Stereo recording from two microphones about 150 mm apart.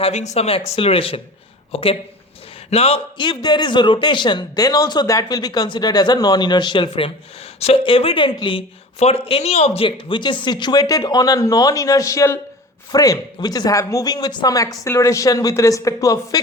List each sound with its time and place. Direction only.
0.0 s a man's voice: 50° left (ahead or behind); by 16.4 s 20° left (ahead or behind)